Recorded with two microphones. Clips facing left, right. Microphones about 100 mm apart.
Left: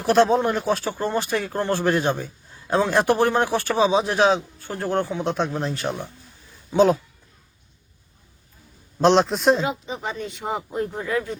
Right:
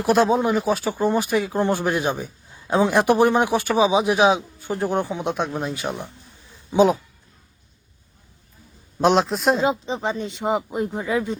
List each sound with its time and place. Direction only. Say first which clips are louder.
0.0 s speech: even; 10° right (ahead or behind)
9.0 s a man's voice: left 1 dB; 5° right (ahead or behind)
9.6 s speech: right 5 dB; 25° right (ahead or behind)